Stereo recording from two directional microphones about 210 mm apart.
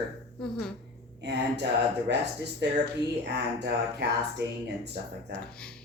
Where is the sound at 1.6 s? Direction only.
50° right (ahead or behind).